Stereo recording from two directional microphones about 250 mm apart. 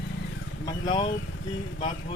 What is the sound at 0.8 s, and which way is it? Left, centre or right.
Speech, centre.